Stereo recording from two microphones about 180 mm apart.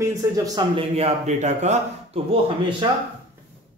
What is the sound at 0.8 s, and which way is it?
Speech, 35° right (ahead or behind).